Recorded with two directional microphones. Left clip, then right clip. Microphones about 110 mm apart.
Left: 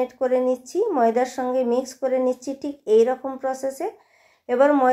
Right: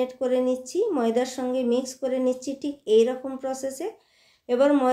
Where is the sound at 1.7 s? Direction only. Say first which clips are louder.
Left 2 dB; 40° right (ahead or behind).